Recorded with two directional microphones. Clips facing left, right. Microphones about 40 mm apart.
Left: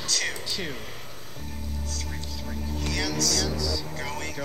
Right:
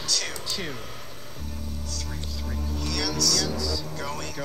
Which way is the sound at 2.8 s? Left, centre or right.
Left.